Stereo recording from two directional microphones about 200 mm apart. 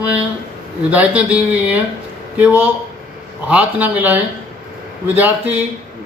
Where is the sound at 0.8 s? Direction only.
5° right (ahead or behind).